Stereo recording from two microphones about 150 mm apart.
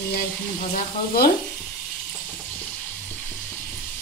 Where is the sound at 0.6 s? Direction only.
60° left (ahead or behind).